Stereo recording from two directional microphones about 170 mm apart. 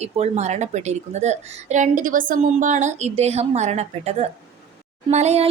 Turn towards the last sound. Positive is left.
turn(degrees=-40)  # may be behind; listen again after turning